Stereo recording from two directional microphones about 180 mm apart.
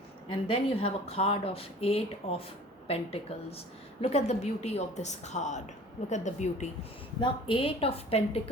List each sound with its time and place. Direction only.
0.3 s speech: 30° left (ahead or behind)
7.2 s speech: 30° left (ahead or behind)